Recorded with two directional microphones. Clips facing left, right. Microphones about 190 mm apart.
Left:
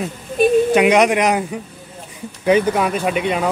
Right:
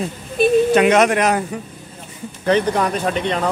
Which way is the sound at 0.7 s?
15° left (ahead or behind).